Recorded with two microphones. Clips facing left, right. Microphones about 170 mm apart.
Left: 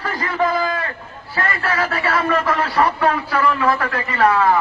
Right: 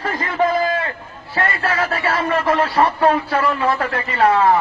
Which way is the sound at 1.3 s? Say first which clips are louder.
Right 1 dB; 30° right (ahead or behind).